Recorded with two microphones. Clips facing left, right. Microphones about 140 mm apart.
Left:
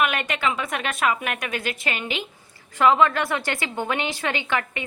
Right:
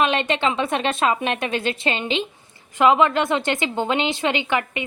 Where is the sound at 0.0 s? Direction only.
25° right (ahead or behind).